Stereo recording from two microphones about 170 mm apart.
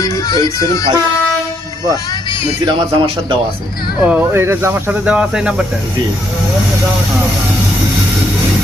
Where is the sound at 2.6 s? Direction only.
30° right (ahead or behind).